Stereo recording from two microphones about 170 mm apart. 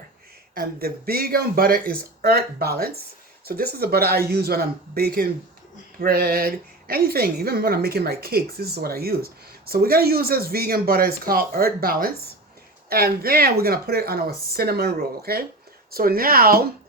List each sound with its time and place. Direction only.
0.5 s a woman's voice: 60° right (ahead or behind)